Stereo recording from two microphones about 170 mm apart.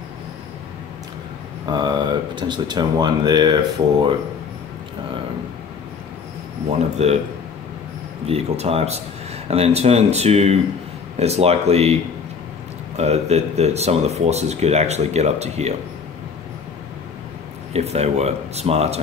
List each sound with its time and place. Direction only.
1.7 s speech: 25° right (ahead or behind)
7.0 s speech: 40° right (ahead or behind)
8.3 s speech: 35° right (ahead or behind)
17.7 s speech: 40° right (ahead or behind)